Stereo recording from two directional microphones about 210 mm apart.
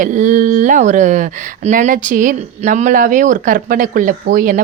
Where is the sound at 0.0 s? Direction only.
35° right (ahead or behind).